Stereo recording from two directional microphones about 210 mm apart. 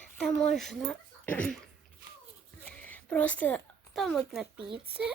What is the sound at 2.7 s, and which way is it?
Speech, 5° left (ahead or behind).